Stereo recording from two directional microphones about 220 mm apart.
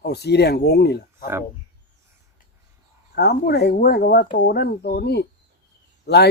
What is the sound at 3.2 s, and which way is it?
Speech, 45° left (ahead or behind).